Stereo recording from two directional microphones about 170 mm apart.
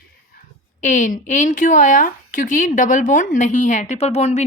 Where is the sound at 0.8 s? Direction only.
45° left (ahead or behind).